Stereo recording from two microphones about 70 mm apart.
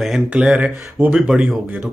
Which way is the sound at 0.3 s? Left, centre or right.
Centre.